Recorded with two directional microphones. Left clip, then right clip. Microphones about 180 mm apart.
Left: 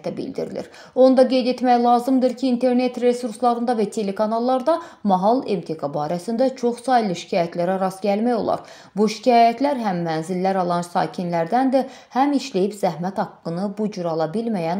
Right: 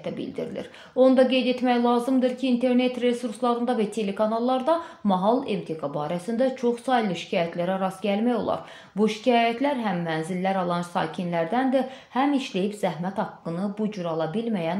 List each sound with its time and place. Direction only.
0.0 s speech: 40° left (ahead or behind)